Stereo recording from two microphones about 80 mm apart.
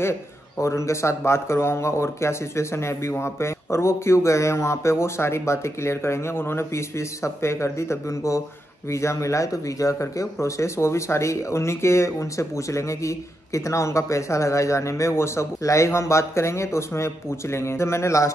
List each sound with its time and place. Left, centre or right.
0.6 s speech: left